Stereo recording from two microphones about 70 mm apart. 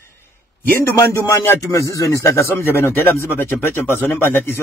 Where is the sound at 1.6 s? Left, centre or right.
Left.